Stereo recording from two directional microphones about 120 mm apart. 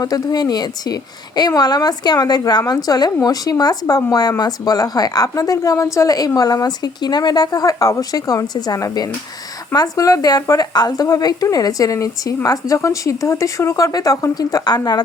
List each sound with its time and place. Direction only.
0.0 s speech: 30° left (ahead or behind)